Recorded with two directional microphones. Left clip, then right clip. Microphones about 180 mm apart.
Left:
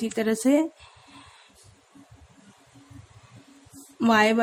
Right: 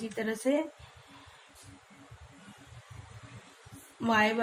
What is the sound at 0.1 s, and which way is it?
Speech, 40° left (ahead or behind).